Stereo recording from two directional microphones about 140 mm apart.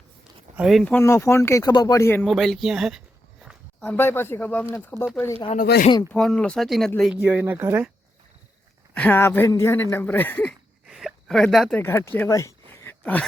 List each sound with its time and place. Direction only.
0.5 s speech: 5° right (ahead or behind)
0.9 s speech: 15° left (ahead or behind)
2.2 s speech: centre (ahead or behind)
3.8 s speech: 10° left (ahead or behind)
5.5 s speech: 75° left (ahead or behind)
6.1 s speech: 5° left (ahead or behind)
7.1 s speech: 15° right (ahead or behind)
9.0 s speech: 15° left (ahead or behind)
10.8 s a sound: centre (ahead or behind)
11.8 s speech: 20° left (ahead or behind)
12.3 s a sound: 20° left (ahead or behind)